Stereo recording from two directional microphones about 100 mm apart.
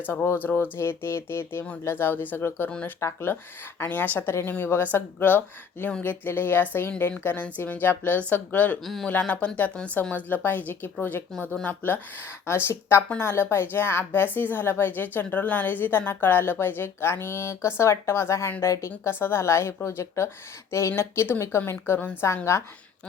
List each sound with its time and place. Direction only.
0.1 s a woman's voice: 20° left (ahead or behind)
3.0 s a woman's voice: 20° left (ahead or behind)
8.8 s speech: centre (ahead or behind)
9.0 s a woman's voice: 15° left (ahead or behind)